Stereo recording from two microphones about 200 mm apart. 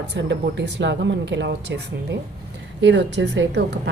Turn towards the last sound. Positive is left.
turn(degrees=-65)  # may be behind; listen again after turning